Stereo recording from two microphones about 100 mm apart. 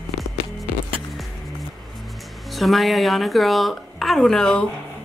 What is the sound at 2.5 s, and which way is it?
A woman's voice, centre (ahead or behind).